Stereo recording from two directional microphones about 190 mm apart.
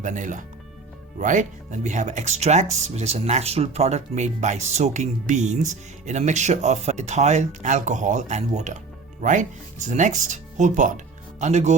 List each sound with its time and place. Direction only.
0.0 s speech: 40° right (ahead or behind)